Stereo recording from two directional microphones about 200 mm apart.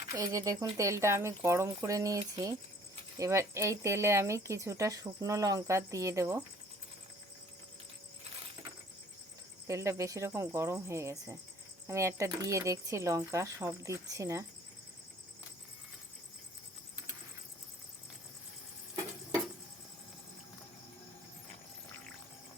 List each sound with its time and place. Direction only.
0.1 s speech: 20° right (ahead or behind)
9.6 s speech: 15° right (ahead or behind)